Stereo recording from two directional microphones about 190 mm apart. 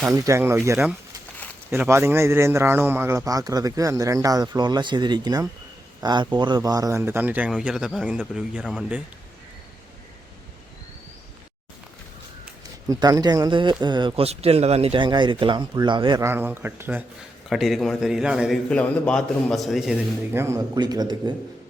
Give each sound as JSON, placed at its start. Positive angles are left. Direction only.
{"t": 0.0, "sound": "a man's voice", "side_deg": -15}
{"t": 12.9, "sound": "speech", "side_deg": -20}
{"t": 17.5, "sound": "a man's voice", "side_deg": 0}
{"t": 20.4, "sound": "speech", "side_deg": -15}